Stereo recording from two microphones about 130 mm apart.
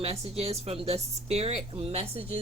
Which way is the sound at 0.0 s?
50° right (ahead or behind).